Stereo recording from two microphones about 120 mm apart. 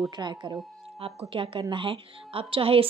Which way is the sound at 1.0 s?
50° right (ahead or behind).